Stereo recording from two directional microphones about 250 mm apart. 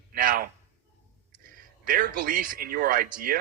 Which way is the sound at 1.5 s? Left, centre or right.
Right.